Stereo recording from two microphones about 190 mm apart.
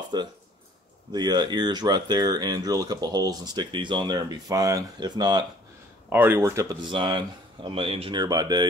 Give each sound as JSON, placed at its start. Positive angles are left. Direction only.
{"t": 0.1, "sound": "speech", "side_deg": -25}